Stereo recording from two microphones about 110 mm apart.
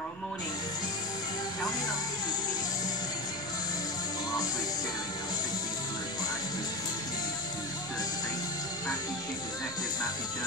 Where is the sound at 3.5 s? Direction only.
35° left (ahead or behind).